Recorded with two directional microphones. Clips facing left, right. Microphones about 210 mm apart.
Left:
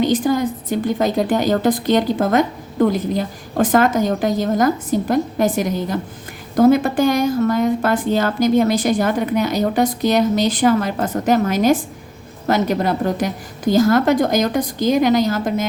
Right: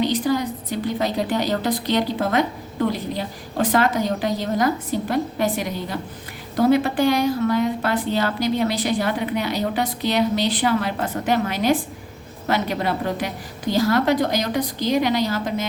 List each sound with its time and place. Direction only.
0.0 s a woman's voice: 50° left (ahead or behind)